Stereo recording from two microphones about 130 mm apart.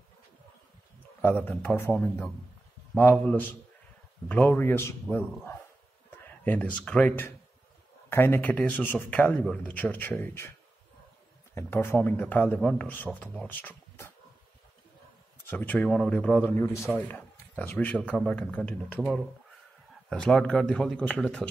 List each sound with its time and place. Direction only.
1.2 s speech: 15° left (ahead or behind)
6.0 s speech: 15° left (ahead or behind)
11.5 s speech: 20° left (ahead or behind)
15.5 s speech: 15° left (ahead or behind)
18.9 s speech: 5° right (ahead or behind)